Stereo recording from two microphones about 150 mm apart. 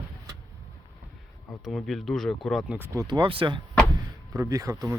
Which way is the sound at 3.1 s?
35° right (ahead or behind).